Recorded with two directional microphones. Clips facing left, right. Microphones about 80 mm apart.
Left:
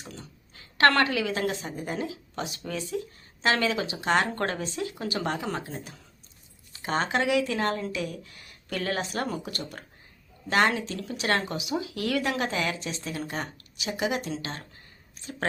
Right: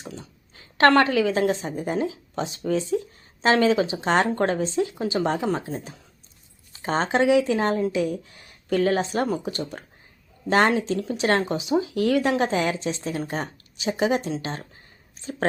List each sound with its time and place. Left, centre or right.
0.0 s a woman's voice: right